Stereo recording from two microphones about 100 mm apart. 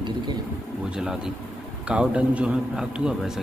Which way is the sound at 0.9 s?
5° right (ahead or behind).